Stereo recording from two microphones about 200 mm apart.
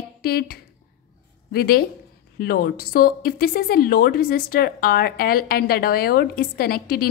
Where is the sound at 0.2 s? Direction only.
50° left (ahead or behind).